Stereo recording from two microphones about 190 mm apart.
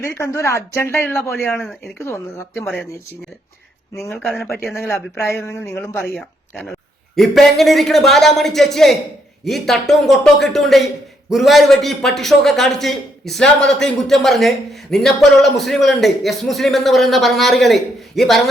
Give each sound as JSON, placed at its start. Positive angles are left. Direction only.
{"t": 0.2, "sound": "speech", "side_deg": 15}
{"t": 3.9, "sound": "speech", "side_deg": 10}
{"t": 6.1, "sound": "a man's voice", "side_deg": 0}